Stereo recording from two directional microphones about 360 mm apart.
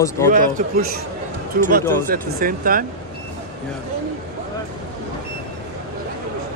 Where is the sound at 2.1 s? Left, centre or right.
Right.